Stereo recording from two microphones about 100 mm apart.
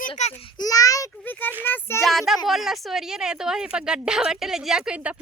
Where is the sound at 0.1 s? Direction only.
70° left (ahead or behind).